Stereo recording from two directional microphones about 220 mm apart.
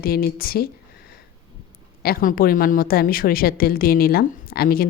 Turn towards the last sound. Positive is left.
turn(degrees=40)  # may be behind; listen again after turning